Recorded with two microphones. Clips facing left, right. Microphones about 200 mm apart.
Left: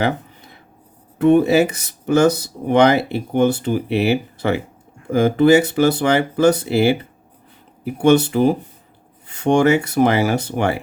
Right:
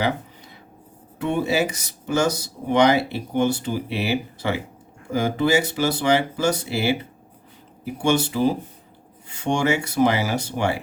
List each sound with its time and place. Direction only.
1.2 s speech: 55° left (ahead or behind)